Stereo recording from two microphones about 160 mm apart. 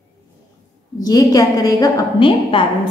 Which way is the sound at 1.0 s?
20° left (ahead or behind).